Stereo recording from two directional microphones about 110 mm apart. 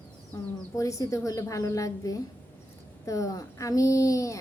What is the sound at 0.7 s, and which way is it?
A woman's voice, 30° left (ahead or behind).